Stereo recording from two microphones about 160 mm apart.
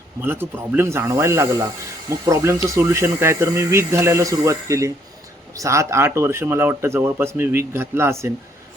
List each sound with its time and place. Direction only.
0.2 s speech: 15° right (ahead or behind)